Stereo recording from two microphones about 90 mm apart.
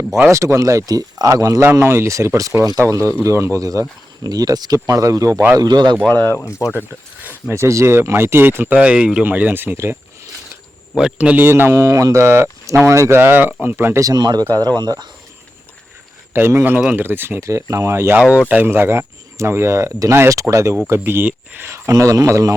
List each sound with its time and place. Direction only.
0.3 s speech: 35° right (ahead or behind)
5.5 s speech: 50° right (ahead or behind)
6.0 s speech: 10° left (ahead or behind)
6.2 s speech: 30° left (ahead or behind)
7.5 s speech: 30° right (ahead or behind)
10.9 s speech: 10° right (ahead or behind); by 14.0 s 25° right (ahead or behind)
14.0 s speech: 45° right (ahead or behind)
16.3 s speech: 25° right (ahead or behind)
18.2 s speech: 15° right (ahead or behind)
21.7 s speech: 35° right (ahead or behind)